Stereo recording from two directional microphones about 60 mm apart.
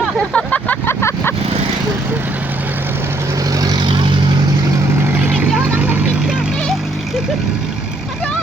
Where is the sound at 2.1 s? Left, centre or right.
Right.